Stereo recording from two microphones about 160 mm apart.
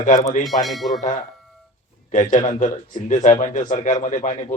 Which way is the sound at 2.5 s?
50° left (ahead or behind).